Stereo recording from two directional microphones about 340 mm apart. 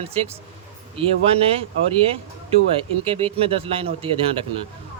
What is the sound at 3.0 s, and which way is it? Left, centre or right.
Speech, centre.